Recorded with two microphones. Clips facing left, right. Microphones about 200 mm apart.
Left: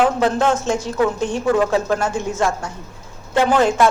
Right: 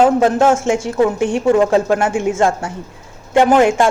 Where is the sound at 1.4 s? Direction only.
25° right (ahead or behind).